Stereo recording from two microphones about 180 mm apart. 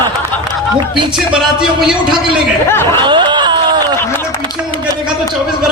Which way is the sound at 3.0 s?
25° right (ahead or behind).